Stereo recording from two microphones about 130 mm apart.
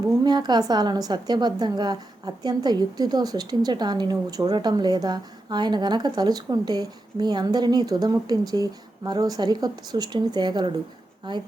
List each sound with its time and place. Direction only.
0.3 s a woman's voice: 35° right (ahead or behind)